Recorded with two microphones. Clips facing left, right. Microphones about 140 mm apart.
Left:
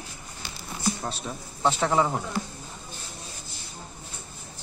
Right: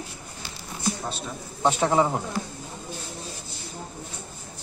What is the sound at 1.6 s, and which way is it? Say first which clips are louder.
Speech: right 2 dB; 20° right (ahead or behind).